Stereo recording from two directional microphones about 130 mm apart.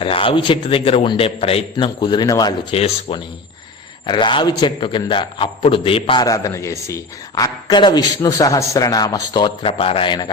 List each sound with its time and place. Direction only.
0.0 s a man's voice: 45° left (ahead or behind)
2.0 s a man's voice: 35° left (ahead or behind)
2.7 s a man's voice: 50° left (ahead or behind)
4.0 s a man's voice: 35° left (ahead or behind)
6.2 s a man's voice: 25° left (ahead or behind)